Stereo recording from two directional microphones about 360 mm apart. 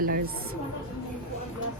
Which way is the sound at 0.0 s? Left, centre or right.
Right.